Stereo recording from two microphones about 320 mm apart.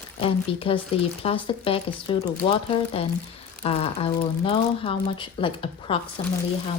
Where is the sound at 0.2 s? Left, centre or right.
Centre.